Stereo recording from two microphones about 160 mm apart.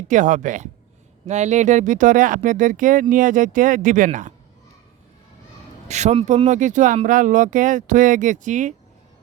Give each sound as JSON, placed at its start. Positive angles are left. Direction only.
{"t": 0.1, "sound": "speech", "side_deg": -50}
{"t": 5.9, "sound": "speech", "side_deg": -45}